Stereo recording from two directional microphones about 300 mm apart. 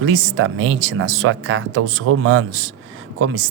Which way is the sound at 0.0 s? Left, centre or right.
Right.